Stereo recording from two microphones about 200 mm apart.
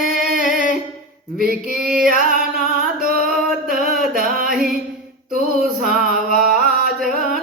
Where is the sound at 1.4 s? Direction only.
45° right (ahead or behind).